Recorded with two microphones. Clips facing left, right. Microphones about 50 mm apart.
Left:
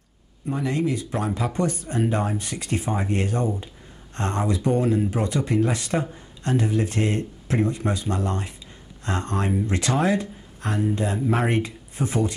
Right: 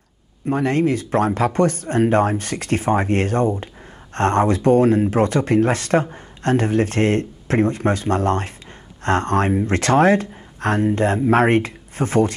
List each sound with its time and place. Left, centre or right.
0.5 s speech: right